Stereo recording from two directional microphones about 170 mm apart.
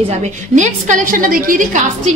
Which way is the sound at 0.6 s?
45° right (ahead or behind).